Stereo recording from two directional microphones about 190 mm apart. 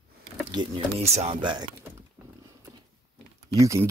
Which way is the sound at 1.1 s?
30° right (ahead or behind).